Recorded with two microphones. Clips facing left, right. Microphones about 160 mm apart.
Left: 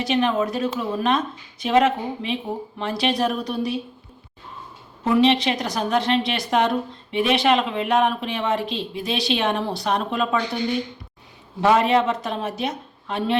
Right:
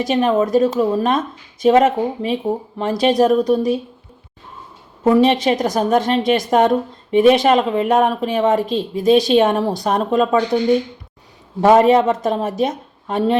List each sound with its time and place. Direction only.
0.0 s a woman's voice: 45° right (ahead or behind)
5.0 s a woman's voice: 45° right (ahead or behind)
11.6 s a woman's voice: 45° right (ahead or behind)